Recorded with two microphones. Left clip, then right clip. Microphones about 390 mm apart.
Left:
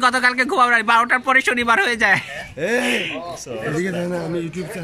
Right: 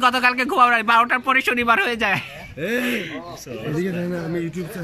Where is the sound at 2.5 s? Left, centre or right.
Centre.